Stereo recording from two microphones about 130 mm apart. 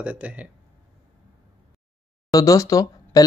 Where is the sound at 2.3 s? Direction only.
25° left (ahead or behind).